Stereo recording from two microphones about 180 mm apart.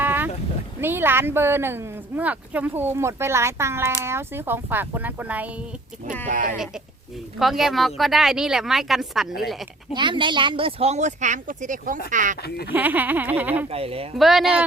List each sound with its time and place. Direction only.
0.0 s boat: 10° right (ahead or behind)
0.8 s speech: 10° right (ahead or behind)
6.2 s speech: 45° right (ahead or behind)
7.3 s a woman's voice: centre (ahead or behind)
9.9 s speech: 25° right (ahead or behind); by 12.4 s 45° right (ahead or behind)
12.4 s speech: 60° left (ahead or behind)
12.7 s speech: 10° right (ahead or behind)
13.7 s speech: 35° right (ahead or behind)
14.2 s a woman's voice: centre (ahead or behind)